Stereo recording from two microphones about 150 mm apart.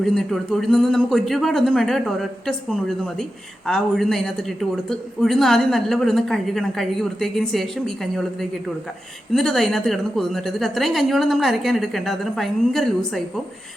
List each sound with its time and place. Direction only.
0.0 s a woman's voice: centre (ahead or behind)